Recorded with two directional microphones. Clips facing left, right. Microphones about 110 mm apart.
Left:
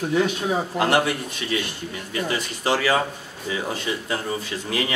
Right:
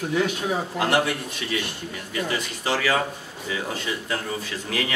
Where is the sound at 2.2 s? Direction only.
30° left (ahead or behind).